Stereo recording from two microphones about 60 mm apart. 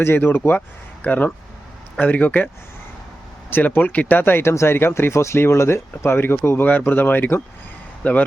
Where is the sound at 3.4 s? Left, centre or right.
Left.